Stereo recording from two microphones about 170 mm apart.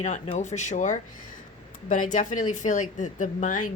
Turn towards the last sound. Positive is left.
turn(degrees=50)  # may be behind; listen again after turning